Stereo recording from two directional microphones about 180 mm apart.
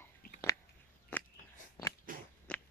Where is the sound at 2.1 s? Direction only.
50° right (ahead or behind).